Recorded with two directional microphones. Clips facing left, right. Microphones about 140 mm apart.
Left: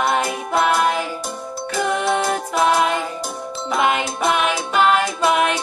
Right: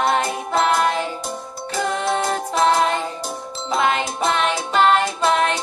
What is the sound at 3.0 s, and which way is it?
Music, 30° right (ahead or behind).